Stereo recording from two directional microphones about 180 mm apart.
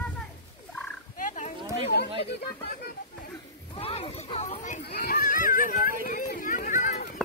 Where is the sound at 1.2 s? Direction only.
45° left (ahead or behind).